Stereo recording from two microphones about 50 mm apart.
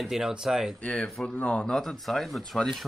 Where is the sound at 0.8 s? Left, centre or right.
Left.